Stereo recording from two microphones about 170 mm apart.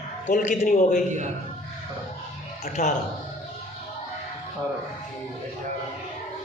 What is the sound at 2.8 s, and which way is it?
Speech, 45° left (ahead or behind).